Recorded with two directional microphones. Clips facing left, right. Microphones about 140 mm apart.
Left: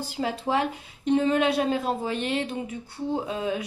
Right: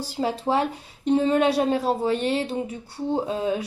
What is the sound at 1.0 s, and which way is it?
A woman's voice, 35° right (ahead or behind).